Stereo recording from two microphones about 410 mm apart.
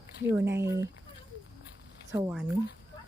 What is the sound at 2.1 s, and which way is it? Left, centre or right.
Speech, centre.